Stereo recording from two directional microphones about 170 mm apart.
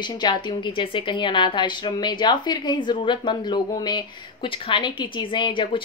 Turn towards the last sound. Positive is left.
turn(degrees=30)  # may be behind; listen again after turning